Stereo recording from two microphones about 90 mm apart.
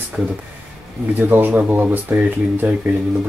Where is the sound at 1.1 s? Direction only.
20° right (ahead or behind).